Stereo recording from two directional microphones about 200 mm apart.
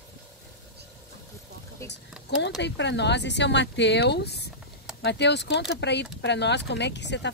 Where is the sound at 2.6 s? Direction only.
60° left (ahead or behind).